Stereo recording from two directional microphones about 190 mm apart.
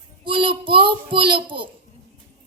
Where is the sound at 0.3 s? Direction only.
25° right (ahead or behind).